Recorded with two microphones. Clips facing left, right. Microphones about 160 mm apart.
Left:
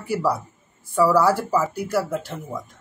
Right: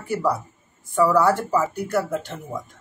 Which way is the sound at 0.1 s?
5° left (ahead or behind).